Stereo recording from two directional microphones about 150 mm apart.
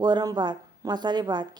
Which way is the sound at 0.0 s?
25° right (ahead or behind).